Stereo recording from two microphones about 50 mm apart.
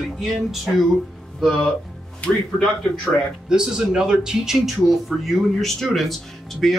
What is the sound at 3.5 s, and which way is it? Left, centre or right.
Speech, centre.